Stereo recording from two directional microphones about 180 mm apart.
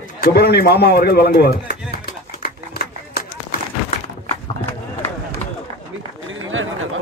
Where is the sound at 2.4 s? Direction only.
55° left (ahead or behind).